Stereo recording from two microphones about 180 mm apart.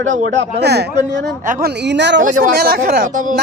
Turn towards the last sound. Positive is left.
turn(degrees=-45)  # may be behind; listen again after turning